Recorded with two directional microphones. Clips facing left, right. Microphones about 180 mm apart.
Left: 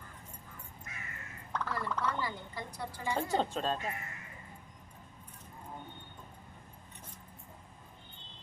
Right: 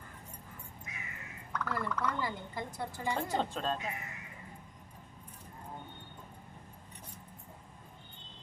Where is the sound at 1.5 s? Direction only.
30° left (ahead or behind).